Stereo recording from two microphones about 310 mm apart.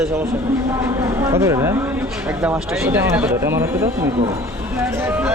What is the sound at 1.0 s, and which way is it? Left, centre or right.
Speech, centre.